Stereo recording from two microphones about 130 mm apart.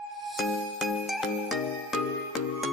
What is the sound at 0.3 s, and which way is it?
Music, centre (ahead or behind).